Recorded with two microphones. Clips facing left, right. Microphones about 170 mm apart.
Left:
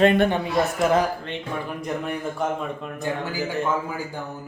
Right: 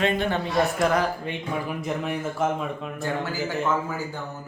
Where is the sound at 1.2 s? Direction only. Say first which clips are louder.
Right 1 dB; 5° right (ahead or behind).